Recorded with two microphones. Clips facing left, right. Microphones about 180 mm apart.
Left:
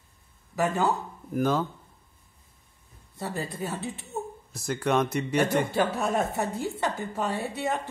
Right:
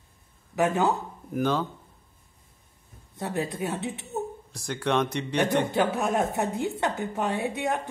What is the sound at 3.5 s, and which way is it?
Speech, 20° right (ahead or behind).